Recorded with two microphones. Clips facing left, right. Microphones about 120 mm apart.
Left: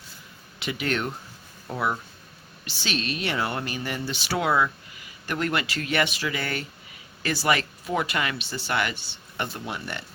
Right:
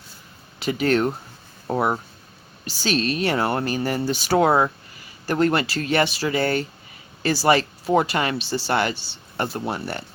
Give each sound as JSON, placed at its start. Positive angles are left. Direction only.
{"t": 0.6, "sound": "speech", "side_deg": -40}